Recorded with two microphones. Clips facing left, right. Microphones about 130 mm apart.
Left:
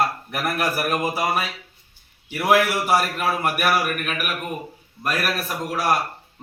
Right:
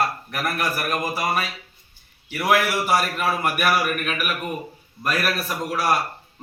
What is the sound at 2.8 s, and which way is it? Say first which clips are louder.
A man's voice: left 1 dB; 5° left (ahead or behind).